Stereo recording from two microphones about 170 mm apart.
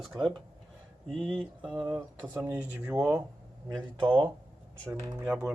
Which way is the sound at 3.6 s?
30° right (ahead or behind).